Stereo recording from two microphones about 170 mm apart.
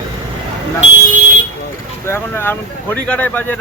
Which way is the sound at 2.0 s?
15° left (ahead or behind).